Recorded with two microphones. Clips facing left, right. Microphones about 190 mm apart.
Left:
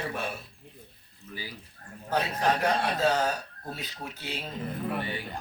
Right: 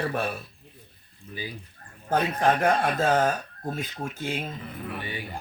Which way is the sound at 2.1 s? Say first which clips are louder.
Right 4 dB; 50° right (ahead or behind).